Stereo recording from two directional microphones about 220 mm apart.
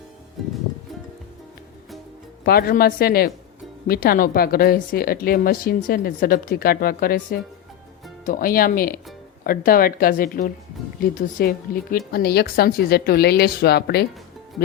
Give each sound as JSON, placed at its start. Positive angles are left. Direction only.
{"t": 2.4, "sound": "a woman's voice", "side_deg": 45}